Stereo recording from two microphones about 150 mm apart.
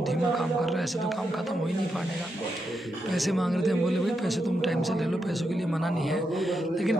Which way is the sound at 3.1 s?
Centre (ahead or behind).